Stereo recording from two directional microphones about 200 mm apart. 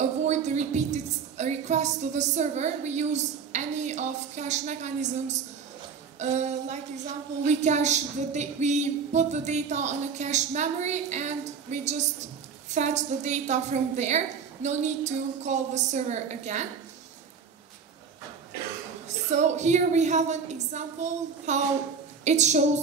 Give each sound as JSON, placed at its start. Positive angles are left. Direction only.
{"t": 0.0, "sound": "a woman's voice", "side_deg": -35}
{"t": 19.0, "sound": "a woman's voice", "side_deg": -35}